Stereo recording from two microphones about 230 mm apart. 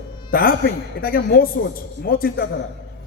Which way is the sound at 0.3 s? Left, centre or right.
Left.